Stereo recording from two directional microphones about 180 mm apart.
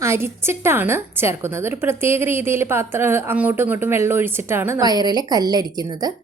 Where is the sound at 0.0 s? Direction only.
15° right (ahead or behind).